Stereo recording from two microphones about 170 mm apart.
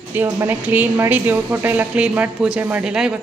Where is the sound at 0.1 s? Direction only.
10° right (ahead or behind).